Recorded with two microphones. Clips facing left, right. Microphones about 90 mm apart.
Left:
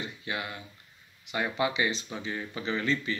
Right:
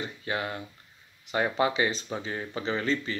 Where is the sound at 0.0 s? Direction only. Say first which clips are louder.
Right 4 dB; 40° right (ahead or behind).